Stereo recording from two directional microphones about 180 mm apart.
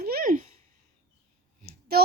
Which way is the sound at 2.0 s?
60° right (ahead or behind).